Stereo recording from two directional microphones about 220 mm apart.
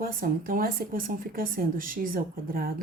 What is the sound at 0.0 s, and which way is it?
A woman's voice, 40° right (ahead or behind).